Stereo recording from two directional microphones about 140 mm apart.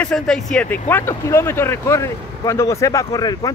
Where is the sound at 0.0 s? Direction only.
5° left (ahead or behind).